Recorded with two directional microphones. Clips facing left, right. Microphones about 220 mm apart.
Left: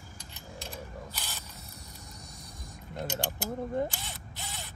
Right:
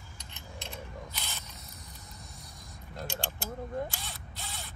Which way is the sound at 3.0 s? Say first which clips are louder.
Left 4 dB; 20° left (ahead or behind).